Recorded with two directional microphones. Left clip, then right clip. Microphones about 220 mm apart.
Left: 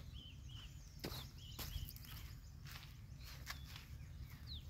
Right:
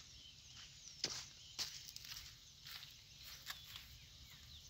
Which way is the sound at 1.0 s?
10° right (ahead or behind).